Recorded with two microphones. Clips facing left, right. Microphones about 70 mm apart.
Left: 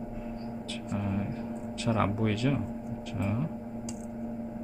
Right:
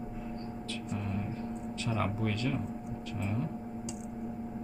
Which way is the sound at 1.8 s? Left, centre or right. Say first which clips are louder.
Left 6 dB; centre.